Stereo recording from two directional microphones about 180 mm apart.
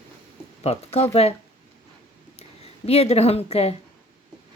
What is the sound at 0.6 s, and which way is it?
Speech, 35° left (ahead or behind).